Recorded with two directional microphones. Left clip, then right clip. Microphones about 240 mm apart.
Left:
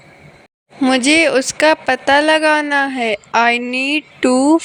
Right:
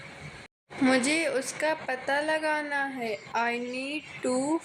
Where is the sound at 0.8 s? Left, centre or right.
Left.